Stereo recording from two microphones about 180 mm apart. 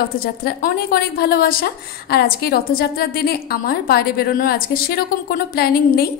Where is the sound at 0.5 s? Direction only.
55° left (ahead or behind).